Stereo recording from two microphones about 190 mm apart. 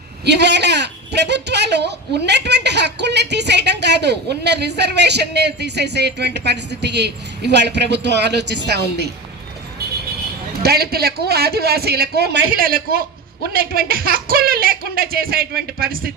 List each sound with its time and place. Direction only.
0.3 s speech: 65° right (ahead or behind)
10.6 s speech: 55° right (ahead or behind)
12.5 s speech: 50° right (ahead or behind)